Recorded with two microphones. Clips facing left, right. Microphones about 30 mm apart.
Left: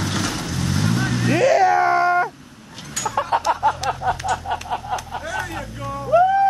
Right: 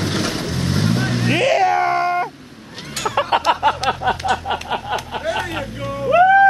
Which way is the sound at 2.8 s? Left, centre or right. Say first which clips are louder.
Right 3 dB; right.